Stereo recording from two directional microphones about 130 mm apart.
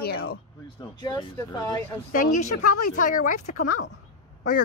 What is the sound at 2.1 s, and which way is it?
Speech, 90° left.